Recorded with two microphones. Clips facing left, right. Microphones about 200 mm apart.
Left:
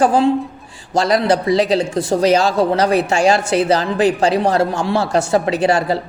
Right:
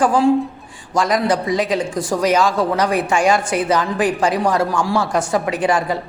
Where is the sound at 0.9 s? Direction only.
30° left (ahead or behind).